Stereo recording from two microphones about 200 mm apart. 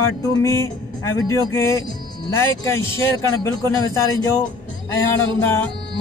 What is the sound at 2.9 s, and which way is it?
Speech, 10° left (ahead or behind).